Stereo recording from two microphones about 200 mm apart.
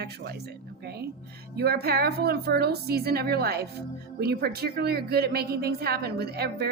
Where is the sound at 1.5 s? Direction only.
50° right (ahead or behind).